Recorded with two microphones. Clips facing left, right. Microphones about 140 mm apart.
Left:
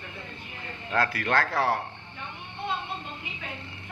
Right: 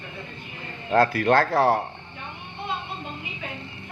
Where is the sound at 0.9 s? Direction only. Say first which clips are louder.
Right 7 dB; 45° right (ahead or behind).